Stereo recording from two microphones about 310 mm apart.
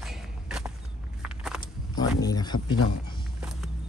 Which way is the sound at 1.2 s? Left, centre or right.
Centre.